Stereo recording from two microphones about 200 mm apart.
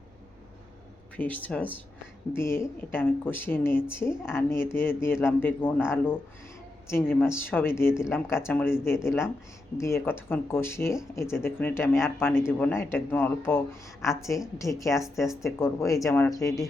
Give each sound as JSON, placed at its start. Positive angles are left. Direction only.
{"t": 1.1, "sound": "speech", "side_deg": 10}